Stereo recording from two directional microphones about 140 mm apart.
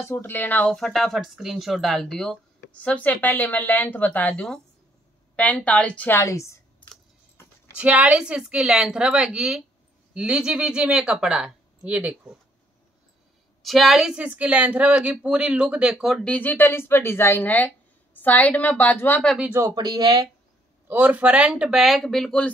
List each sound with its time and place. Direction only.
0.0 s speech: 20° left (ahead or behind)
7.4 s a sound: 15° left (ahead or behind)
7.7 s speech: 10° right (ahead or behind)
13.6 s speech: centre (ahead or behind)
16.3 s speech: 15° left (ahead or behind)
19.5 s speech: 25° right (ahead or behind)
20.9 s speech: 15° right (ahead or behind); by 22.5 s 5° left (ahead or behind)